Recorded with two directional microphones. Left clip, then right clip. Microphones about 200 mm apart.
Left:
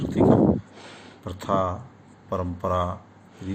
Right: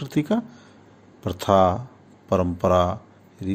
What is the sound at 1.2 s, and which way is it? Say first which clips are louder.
Speech: right 7 dB; 55° right (ahead or behind).